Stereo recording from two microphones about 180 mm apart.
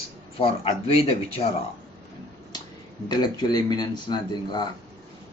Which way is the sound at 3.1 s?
25° left (ahead or behind).